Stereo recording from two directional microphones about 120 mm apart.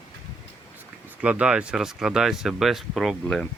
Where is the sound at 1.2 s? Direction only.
10° right (ahead or behind); by 3.5 s 5° left (ahead or behind).